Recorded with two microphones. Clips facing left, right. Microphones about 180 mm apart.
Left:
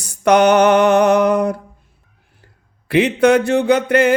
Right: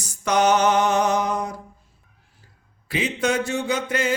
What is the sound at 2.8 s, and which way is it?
Speech, 65° left (ahead or behind).